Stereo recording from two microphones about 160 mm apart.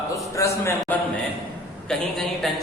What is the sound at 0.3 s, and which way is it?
Speech, 20° left (ahead or behind).